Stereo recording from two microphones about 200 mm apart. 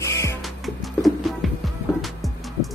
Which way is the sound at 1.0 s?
Centre (ahead or behind).